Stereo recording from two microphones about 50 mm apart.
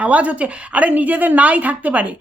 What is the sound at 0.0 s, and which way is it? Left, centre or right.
A woman's voice, right.